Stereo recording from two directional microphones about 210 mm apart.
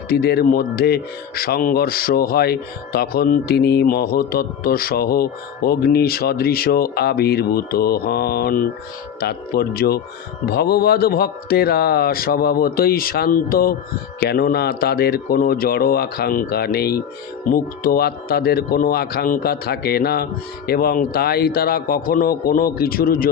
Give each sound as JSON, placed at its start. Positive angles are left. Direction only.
{"t": 0.1, "sound": "speech", "side_deg": 50}